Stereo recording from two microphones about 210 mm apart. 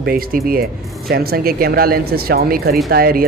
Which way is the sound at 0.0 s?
45° right (ahead or behind).